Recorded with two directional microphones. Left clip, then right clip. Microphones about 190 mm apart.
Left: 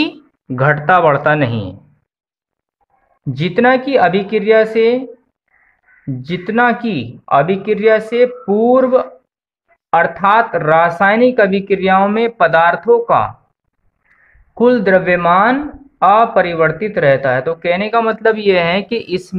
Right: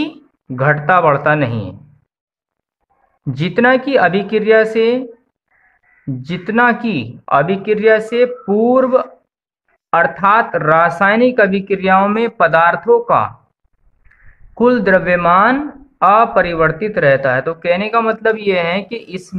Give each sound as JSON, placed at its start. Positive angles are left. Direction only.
{"t": 0.0, "sound": "speech", "side_deg": 30}
{"t": 3.3, "sound": "speech", "side_deg": 0}
{"t": 6.0, "sound": "speech", "side_deg": 5}